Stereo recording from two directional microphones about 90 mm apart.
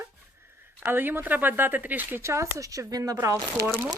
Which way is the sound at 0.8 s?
25° right (ahead or behind).